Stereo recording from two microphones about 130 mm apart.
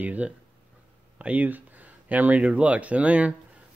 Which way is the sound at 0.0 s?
10° right (ahead or behind).